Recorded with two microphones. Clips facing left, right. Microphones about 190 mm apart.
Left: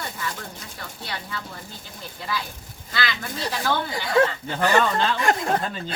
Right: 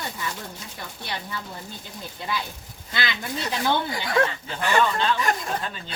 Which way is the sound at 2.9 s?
20° right (ahead or behind).